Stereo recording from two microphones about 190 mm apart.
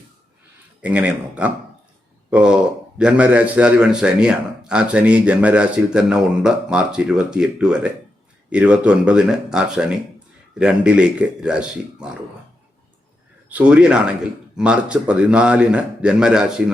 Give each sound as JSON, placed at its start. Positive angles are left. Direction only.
{"t": 0.8, "sound": "a man's voice", "side_deg": -5}
{"t": 13.5, "sound": "speech", "side_deg": -5}